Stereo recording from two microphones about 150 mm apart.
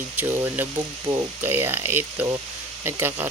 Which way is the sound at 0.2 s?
15° right (ahead or behind).